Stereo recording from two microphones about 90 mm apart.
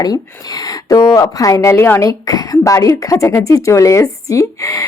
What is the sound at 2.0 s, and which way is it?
Speech, 40° left (ahead or behind).